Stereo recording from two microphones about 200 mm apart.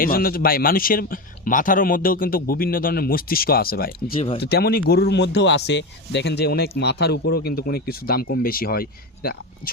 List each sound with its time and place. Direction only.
0.0 s speech: 45° left (ahead or behind)